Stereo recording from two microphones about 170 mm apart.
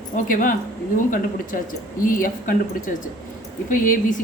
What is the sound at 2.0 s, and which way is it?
A woman's voice, 55° left (ahead or behind).